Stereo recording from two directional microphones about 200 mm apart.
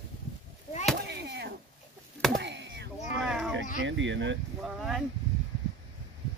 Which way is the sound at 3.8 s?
65° right (ahead or behind).